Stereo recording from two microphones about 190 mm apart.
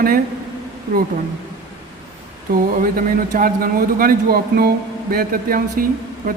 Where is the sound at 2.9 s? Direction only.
45° right (ahead or behind).